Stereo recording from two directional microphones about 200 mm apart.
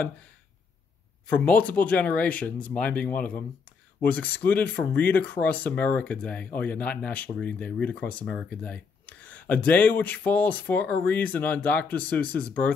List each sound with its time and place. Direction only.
1.2 s speech: 5° left (ahead or behind)